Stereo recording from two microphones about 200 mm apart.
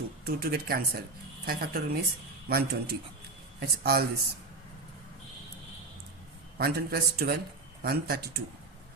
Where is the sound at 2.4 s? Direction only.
50° right (ahead or behind).